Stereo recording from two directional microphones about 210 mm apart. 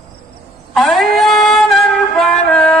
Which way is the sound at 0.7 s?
Centre (ahead or behind).